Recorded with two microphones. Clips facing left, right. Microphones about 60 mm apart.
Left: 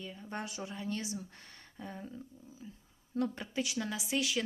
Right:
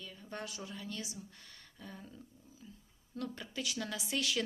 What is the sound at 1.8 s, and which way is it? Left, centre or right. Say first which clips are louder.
A woman's voice: left 6 dB; left.